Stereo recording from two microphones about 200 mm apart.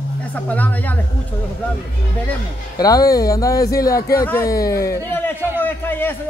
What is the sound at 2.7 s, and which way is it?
Speech, 20° left (ahead or behind).